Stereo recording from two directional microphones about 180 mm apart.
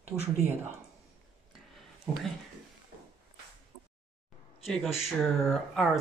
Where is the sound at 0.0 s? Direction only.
10° right (ahead or behind).